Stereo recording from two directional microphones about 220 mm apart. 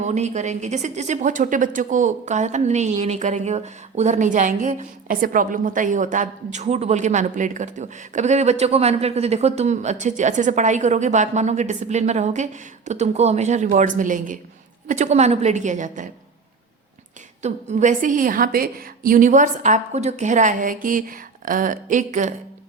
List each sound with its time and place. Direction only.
0.0 s a woman's voice: 30° right (ahead or behind)
17.4 s a woman's voice: 30° right (ahead or behind)